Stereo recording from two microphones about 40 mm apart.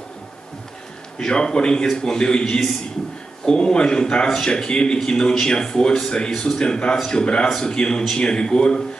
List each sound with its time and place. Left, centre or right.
1.1 s a man's voice: centre